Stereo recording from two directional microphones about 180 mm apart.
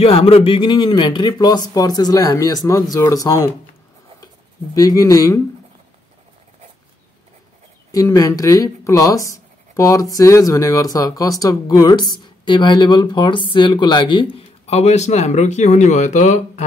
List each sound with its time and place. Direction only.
0.0 s speech: 30° left (ahead or behind)
4.7 s speech: 20° left (ahead or behind)
7.9 s speech: 20° left (ahead or behind); by 16.6 s 40° left (ahead or behind)